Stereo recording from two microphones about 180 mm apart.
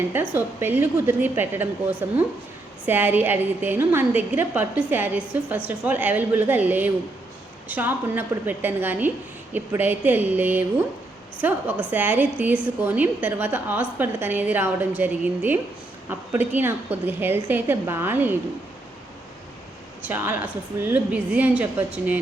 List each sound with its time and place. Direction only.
0.1 s a woman's voice: 10° right (ahead or behind)
20.1 s a woman's voice: 10° right (ahead or behind)